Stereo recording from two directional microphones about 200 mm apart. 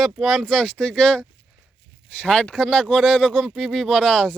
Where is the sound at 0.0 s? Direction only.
Centre (ahead or behind).